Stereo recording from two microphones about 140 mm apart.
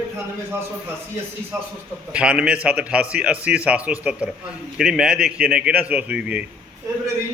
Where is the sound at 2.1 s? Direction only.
5° right (ahead or behind).